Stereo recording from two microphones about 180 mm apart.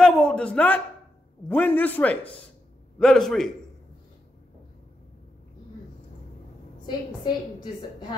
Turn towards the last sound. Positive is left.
turn(degrees=25)  # may be behind; listen again after turning